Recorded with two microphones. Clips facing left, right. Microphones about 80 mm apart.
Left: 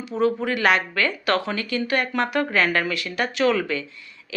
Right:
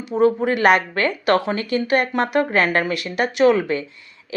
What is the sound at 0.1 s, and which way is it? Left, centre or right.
Speech, right.